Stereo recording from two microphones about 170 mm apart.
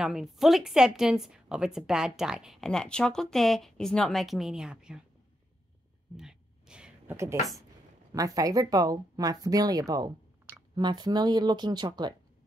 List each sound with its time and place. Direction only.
0.0 s a woman's voice: centre (ahead or behind)
6.1 s a sound: 5° right (ahead or behind)
8.1 s speech: 20° right (ahead or behind)